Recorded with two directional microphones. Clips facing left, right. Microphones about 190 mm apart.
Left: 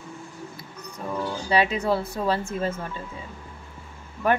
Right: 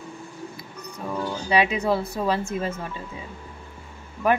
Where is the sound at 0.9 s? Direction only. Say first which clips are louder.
Even; 10° right (ahead or behind).